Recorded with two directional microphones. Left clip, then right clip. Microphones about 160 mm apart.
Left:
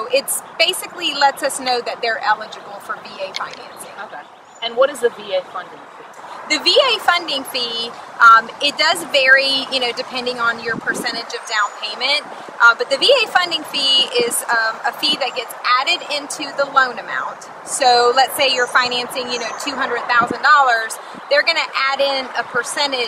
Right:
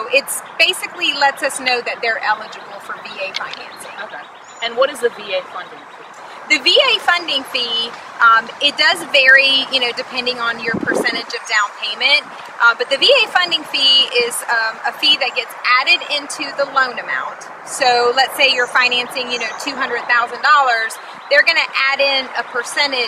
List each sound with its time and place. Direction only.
0.1 s speech: 5° left (ahead or behind)
4.6 s a woman's voice: centre (ahead or behind)